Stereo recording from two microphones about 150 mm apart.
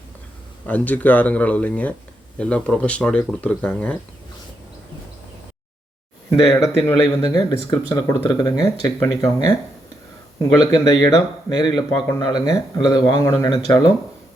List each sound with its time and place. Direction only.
0.7 s speech: 10° left (ahead or behind)
6.6 s speech: 20° left (ahead or behind)
10.6 s speech: 30° left (ahead or behind)